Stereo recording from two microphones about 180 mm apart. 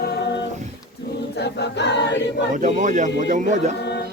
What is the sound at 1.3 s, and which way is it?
Choir, 70° left (ahead or behind).